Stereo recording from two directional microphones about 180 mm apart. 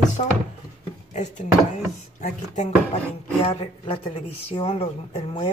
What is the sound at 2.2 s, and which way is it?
A woman's voice, 40° left (ahead or behind).